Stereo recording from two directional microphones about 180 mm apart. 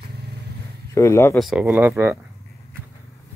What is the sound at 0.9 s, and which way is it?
Speech, 15° left (ahead or behind).